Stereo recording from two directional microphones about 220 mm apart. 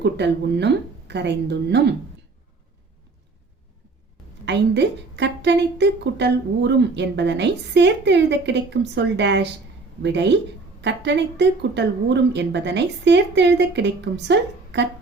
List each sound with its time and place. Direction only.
0.0 s a woman's voice: 50° right (ahead or behind)
4.4 s a woman's voice: 55° right (ahead or behind)